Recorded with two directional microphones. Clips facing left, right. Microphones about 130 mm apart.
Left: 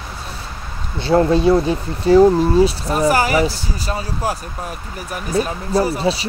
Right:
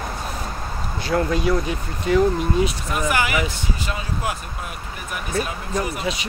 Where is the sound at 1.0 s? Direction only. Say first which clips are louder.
Left 7 dB; 30° left (ahead or behind).